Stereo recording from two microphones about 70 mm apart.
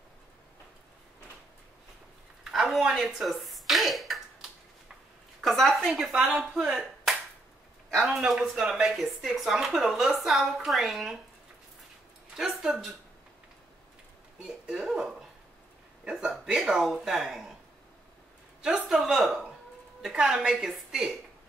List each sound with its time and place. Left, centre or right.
2.5 s a sound: centre
7.9 s speech: centre
12.4 s speech: centre
14.4 s speech: centre
18.6 s speech: centre